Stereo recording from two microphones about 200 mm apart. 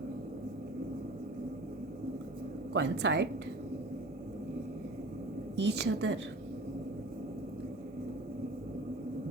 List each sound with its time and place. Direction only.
2.7 s a woman's voice: 60° right (ahead or behind)
5.5 s a woman's voice: 55° right (ahead or behind)